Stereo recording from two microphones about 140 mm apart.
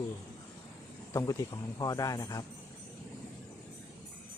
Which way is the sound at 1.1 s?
25° left (ahead or behind).